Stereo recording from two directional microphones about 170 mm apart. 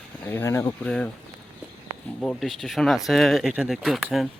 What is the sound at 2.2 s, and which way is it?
Speech, centre (ahead or behind).